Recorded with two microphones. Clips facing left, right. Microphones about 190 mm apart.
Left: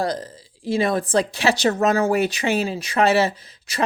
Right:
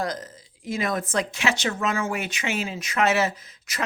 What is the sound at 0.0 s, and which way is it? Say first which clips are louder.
Speech: left 5 dB; 30° left (ahead or behind).